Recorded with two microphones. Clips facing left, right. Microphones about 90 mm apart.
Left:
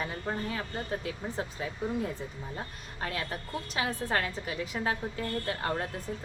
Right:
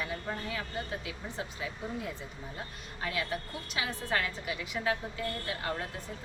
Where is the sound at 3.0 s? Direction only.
40° left (ahead or behind).